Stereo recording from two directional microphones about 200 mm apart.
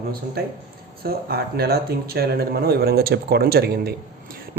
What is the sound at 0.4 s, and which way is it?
Speech, 50° right (ahead or behind).